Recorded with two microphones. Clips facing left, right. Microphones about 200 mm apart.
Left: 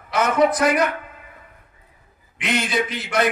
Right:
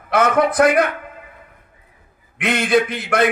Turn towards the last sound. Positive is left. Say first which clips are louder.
# right 5 dB
turn(degrees=-55)  # may be behind; listen again after turning